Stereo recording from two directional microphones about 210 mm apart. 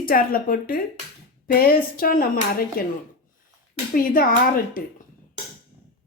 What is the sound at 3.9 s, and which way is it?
Speech, 45° left (ahead or behind).